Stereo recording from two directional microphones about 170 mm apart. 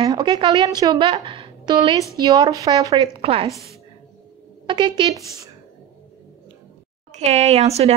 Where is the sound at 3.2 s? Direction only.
35° right (ahead or behind).